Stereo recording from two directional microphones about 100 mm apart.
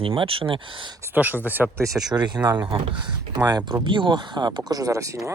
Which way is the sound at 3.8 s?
55° right (ahead or behind).